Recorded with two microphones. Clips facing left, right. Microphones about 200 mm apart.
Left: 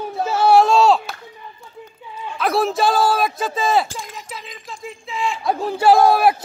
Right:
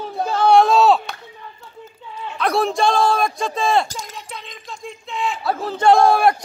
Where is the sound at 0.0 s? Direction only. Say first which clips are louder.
Even; 5° left (ahead or behind).